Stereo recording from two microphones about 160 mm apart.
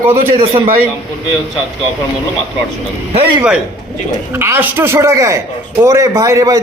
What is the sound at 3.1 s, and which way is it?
Speech, 35° right (ahead or behind).